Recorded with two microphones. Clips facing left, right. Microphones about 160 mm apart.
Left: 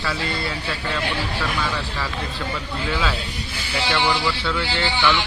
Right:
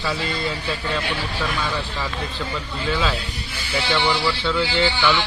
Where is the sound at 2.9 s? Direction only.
5° left (ahead or behind).